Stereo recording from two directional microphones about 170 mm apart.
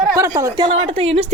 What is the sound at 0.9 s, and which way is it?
Speech, 35° right (ahead or behind).